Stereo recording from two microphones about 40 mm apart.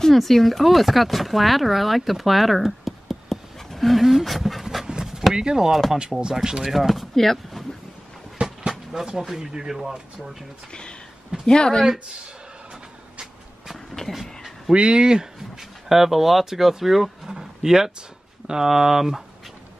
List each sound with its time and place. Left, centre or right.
0.0 s speech: centre
4.8 s a sound: centre
6.2 s speech: centre
6.7 s speech: centre
8.5 s speech: centre
10.7 s speech: left
14.7 s speech: right
15.9 s speech: centre